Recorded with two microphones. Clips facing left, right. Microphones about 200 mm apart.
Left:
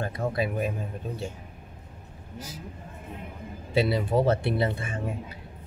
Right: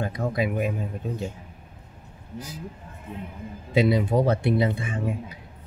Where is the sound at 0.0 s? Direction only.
15° right (ahead or behind).